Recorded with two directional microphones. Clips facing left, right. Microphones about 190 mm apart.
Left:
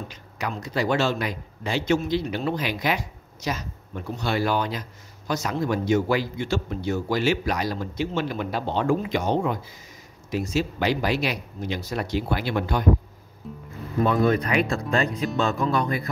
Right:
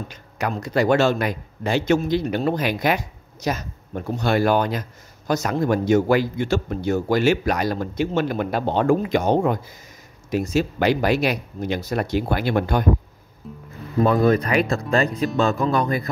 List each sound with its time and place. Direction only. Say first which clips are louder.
0.1 s speech: right 5 dB; 50° right (ahead or behind)
13.4 s speech: even; centre (ahead or behind)
14.0 s speech: right 3 dB; 40° right (ahead or behind)